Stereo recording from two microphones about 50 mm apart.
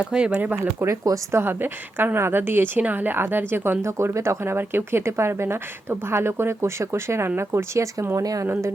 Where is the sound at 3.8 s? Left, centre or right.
Right.